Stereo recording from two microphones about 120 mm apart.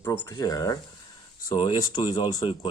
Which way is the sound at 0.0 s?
25° left (ahead or behind).